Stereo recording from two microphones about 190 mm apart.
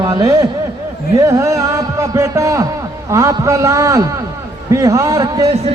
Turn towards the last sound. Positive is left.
turn(degrees=-20)  # may be behind; listen again after turning